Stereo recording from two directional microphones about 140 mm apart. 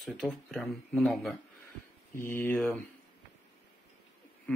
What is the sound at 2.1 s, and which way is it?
Speech, 15° left (ahead or behind).